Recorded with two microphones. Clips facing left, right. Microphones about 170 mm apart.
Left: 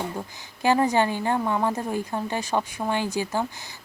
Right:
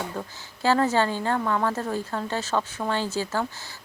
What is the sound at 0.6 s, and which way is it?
Speech, 15° left (ahead or behind).